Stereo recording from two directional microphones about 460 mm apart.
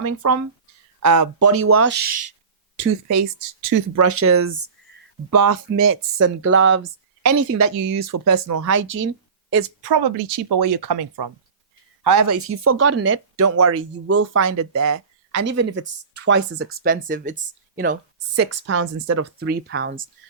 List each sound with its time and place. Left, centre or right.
0.1 s speech: right; by 2.2 s centre
3.7 s speech: right
8.0 s speech: right
9.9 s speech: right
12.4 s speech: right
18.3 s speech: right
19.4 s speech: right